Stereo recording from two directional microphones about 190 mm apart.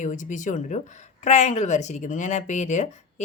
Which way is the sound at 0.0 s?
40° left (ahead or behind).